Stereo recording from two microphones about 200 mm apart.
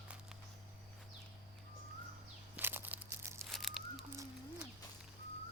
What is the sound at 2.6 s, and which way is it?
Crumpling, 10° right (ahead or behind).